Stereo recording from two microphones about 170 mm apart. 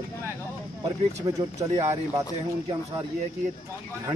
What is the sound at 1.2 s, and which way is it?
Speech, 20° right (ahead or behind).